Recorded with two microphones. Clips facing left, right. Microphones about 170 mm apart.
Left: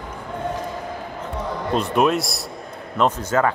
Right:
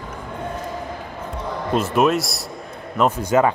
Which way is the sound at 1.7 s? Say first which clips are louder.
Right 1 dB; centre (ahead or behind).